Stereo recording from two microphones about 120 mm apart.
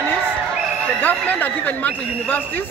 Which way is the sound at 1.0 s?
15° left (ahead or behind).